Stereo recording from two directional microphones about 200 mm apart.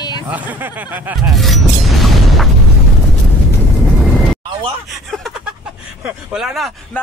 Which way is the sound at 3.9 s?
Centre (ahead or behind).